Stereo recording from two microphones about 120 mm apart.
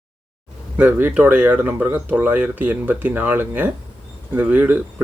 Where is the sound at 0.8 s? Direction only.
15° right (ahead or behind).